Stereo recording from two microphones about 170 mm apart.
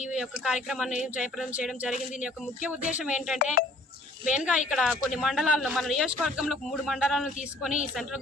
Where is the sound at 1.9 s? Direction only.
50° left (ahead or behind).